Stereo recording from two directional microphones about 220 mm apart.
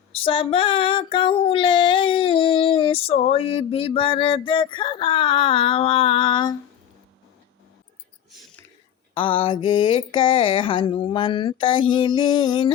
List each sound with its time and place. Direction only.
0.1 s female singing: 25° left (ahead or behind)
9.1 s female singing: 25° left (ahead or behind)